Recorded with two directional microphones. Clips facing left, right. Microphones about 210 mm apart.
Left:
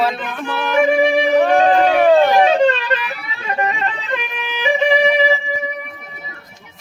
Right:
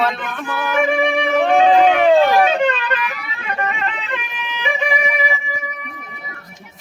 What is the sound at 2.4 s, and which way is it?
Music, 35° left (ahead or behind).